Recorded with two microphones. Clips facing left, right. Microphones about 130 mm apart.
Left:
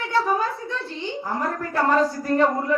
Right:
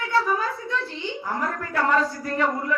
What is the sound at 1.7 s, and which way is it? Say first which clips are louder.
A woman's voice: left 2 dB; 30° left (ahead or behind).